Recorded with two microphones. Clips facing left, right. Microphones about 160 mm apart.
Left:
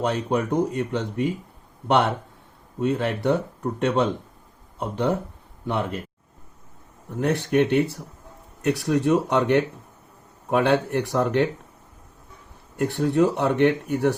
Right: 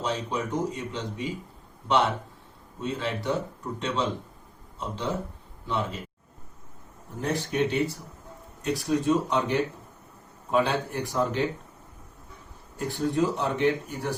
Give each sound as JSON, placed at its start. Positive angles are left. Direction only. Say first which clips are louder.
{"t": 0.0, "sound": "speech", "louder": "left 6 dB", "side_deg": 60}
{"t": 2.8, "sound": "speech", "louder": "left 7 dB", "side_deg": 60}
{"t": 7.2, "sound": "speech", "louder": "left 6 dB", "side_deg": 65}
{"t": 12.7, "sound": "speech", "louder": "left 6 dB", "side_deg": 70}